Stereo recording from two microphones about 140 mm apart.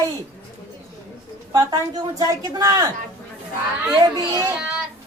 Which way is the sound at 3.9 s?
25° right (ahead or behind).